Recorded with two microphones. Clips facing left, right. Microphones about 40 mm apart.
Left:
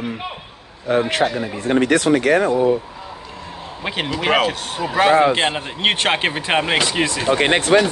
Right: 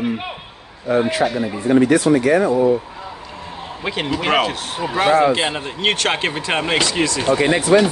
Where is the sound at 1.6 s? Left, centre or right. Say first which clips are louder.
Right 2 dB; left.